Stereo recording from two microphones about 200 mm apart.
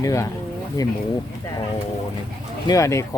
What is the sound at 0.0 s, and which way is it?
Speech, 15° left (ahead or behind).